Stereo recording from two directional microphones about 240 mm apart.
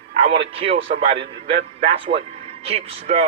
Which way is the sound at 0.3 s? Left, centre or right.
Right.